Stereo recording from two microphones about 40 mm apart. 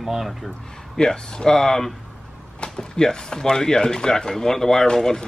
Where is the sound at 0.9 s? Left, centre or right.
Centre.